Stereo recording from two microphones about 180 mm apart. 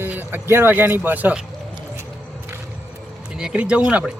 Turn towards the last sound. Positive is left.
turn(degrees=-5)  # may be behind; listen again after turning